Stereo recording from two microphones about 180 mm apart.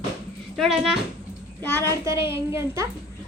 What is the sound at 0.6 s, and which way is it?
Speech, centre (ahead or behind).